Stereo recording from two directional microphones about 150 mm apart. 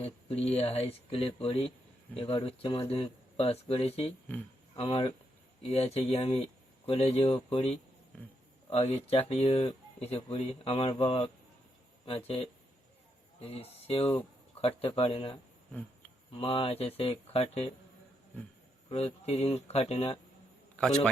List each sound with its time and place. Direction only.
0.0 s a sound: 40° left (ahead or behind)
0.6 s speech: 40° left (ahead or behind)
18.9 s speech: 45° left (ahead or behind)
20.7 s a man's voice: 5° left (ahead or behind)